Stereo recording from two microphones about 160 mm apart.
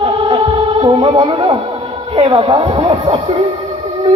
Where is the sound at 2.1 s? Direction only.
30° right (ahead or behind).